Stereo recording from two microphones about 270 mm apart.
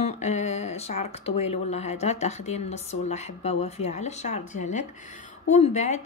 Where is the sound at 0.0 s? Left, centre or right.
Left.